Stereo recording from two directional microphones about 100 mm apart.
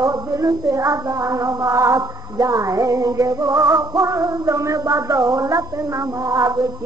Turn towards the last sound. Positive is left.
turn(degrees=-35)  # may be behind; listen again after turning